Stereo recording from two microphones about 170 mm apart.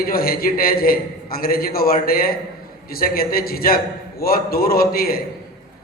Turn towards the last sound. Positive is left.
turn(degrees=60)  # may be behind; listen again after turning